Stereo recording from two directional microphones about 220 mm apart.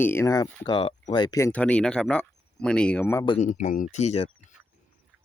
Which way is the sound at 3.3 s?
35° left (ahead or behind).